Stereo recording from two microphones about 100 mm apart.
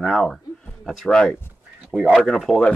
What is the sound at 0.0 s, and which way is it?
Speech, centre (ahead or behind).